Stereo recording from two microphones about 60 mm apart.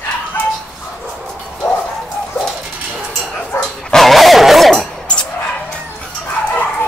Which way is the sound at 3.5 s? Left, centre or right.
Left.